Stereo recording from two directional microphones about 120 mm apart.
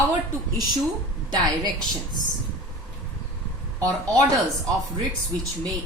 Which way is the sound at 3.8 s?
30° right (ahead or behind).